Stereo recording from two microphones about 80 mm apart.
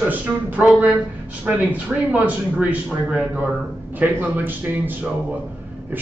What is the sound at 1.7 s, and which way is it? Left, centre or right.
Speech, right.